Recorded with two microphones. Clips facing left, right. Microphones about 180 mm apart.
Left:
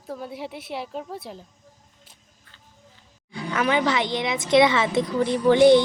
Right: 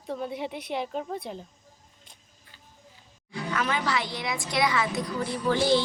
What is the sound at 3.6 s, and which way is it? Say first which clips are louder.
A woman's voice: left 8 dB; 20° left (ahead or behind).